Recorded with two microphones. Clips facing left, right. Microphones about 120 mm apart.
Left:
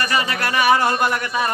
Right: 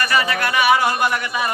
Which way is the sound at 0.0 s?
35° left (ahead or behind).